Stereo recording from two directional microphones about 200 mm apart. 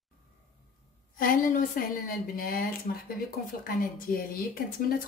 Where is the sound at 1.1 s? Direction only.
45° left (ahead or behind).